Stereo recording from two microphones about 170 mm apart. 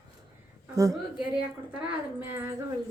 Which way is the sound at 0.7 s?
20° right (ahead or behind).